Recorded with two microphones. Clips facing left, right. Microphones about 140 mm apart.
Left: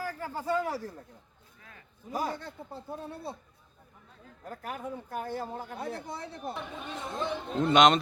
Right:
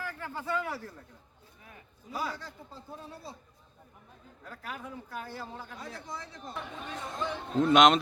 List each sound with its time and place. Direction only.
0.0 s speech: 40° left (ahead or behind)
2.0 s a man's voice: 45° left (ahead or behind)
4.4 s speech: 45° left (ahead or behind); by 6.5 s 65° left (ahead or behind)
6.5 s speech: 20° left (ahead or behind)
7.5 s speech: centre (ahead or behind)